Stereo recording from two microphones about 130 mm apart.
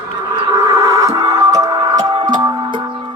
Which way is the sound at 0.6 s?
25° right (ahead or behind).